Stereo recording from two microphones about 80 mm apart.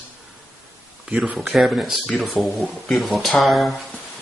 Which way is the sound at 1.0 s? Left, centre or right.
Centre.